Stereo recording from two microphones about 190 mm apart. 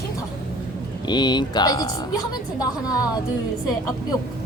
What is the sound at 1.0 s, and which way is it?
Speech, 25° left (ahead or behind).